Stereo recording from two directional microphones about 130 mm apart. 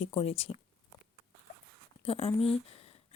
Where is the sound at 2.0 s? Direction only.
45° left (ahead or behind).